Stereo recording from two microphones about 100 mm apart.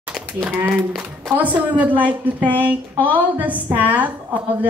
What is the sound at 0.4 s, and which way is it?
Speech, 15° right (ahead or behind).